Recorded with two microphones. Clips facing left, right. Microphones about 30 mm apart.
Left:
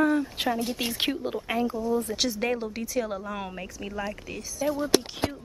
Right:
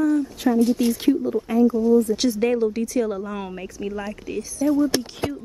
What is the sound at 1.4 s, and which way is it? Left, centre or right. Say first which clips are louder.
Speech: right 9 dB; left.